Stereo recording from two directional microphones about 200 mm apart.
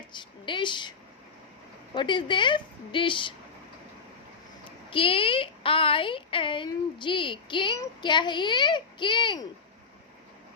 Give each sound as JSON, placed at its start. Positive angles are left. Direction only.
{"t": 0.1, "sound": "a woman's voice", "side_deg": 25}
{"t": 2.0, "sound": "a woman's voice", "side_deg": 25}
{"t": 4.9, "sound": "a woman's voice", "side_deg": 25}